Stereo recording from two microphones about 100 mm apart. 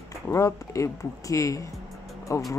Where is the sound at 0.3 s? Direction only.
30° left (ahead or behind).